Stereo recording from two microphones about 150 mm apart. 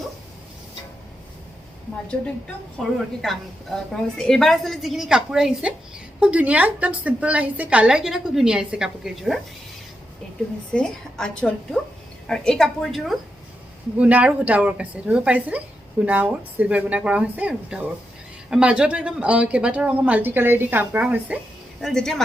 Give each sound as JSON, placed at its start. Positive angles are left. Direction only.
{"t": 2.7, "sound": "a woman's voice", "side_deg": 0}
{"t": 10.7, "sound": "a woman's voice", "side_deg": 5}
{"t": 21.8, "sound": "speech", "side_deg": 0}